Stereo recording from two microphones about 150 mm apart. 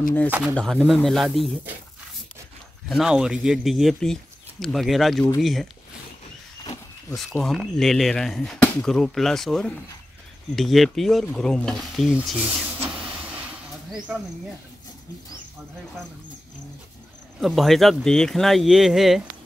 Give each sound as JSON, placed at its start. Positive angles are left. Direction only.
{"t": 0.6, "sound": "speech", "side_deg": 5}
{"t": 2.9, "sound": "speech", "side_deg": -5}
{"t": 6.6, "sound": "a sound", "side_deg": 30}
{"t": 7.3, "sound": "speech", "side_deg": 0}
{"t": 12.8, "sound": "vehicle", "side_deg": -5}
{"t": 13.9, "sound": "speech", "side_deg": -5}
{"t": 17.4, "sound": "speech", "side_deg": 0}